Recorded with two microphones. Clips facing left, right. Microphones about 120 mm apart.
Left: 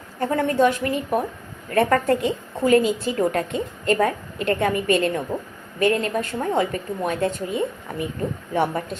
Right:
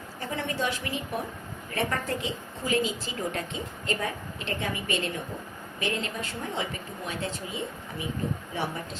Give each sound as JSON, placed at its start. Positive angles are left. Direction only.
{"t": 0.2, "sound": "a woman's voice", "side_deg": 50}